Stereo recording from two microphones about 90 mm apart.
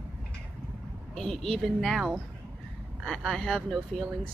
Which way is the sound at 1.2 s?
5° left (ahead or behind).